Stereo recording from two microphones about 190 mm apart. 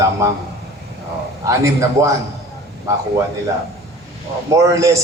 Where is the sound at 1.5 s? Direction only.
15° right (ahead or behind).